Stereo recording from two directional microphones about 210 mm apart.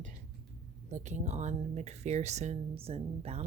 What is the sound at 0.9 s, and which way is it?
A woman's voice, 35° right (ahead or behind).